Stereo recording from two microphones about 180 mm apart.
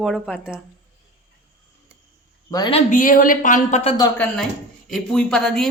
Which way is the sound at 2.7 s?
45° left (ahead or behind).